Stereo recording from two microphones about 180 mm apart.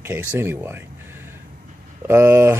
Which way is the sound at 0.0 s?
10° right (ahead or behind).